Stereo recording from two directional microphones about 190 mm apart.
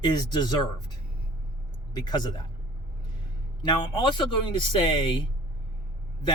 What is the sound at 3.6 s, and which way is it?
Speech, 25° left (ahead or behind).